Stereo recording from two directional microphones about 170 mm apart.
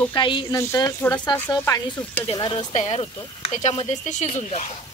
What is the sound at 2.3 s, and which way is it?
Speech, 25° left (ahead or behind).